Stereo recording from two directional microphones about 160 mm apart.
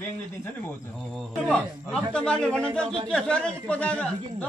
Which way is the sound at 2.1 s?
5° left (ahead or behind).